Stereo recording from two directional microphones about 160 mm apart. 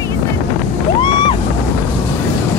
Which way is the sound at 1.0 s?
30° left (ahead or behind).